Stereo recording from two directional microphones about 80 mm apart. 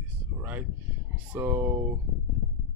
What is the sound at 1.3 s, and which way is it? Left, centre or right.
Speech, right.